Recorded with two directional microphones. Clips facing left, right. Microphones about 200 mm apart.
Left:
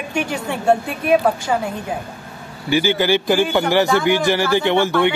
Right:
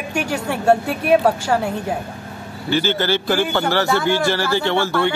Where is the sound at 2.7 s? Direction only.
15° left (ahead or behind).